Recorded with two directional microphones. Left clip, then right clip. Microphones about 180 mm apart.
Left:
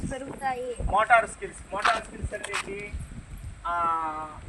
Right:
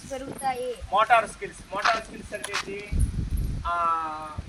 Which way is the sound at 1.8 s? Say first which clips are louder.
Right 1 dB; 5° right (ahead or behind).